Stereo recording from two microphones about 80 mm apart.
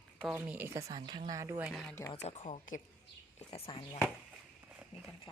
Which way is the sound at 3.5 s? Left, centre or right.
Left.